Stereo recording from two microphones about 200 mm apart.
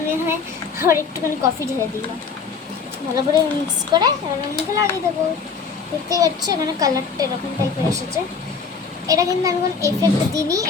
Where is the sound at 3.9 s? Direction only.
20° right (ahead or behind).